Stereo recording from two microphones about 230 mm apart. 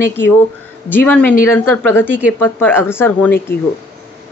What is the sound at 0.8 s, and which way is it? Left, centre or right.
Speech, centre.